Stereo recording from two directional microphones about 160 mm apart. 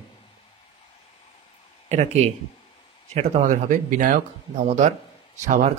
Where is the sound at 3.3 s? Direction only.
55° right (ahead or behind).